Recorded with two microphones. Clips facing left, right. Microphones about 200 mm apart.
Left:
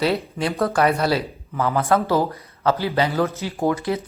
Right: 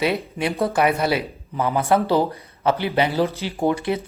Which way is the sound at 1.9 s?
25° right (ahead or behind).